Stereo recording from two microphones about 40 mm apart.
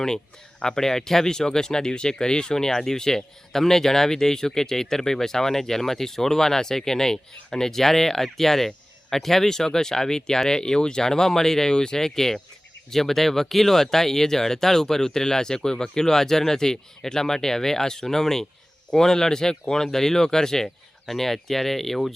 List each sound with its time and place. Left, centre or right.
0.6 s speech: centre